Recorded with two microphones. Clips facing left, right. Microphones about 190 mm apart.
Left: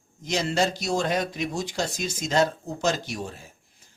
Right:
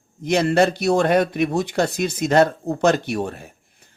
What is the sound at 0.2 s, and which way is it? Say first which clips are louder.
Speech: right 8 dB; 60° right (ahead or behind).